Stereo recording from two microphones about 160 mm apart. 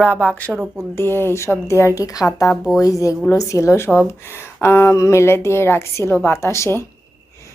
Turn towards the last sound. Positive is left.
turn(degrees=15)  # may be behind; listen again after turning